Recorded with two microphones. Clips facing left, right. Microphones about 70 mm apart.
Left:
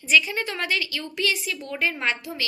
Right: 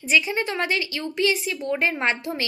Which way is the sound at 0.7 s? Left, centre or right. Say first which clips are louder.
Right 2 dB; right.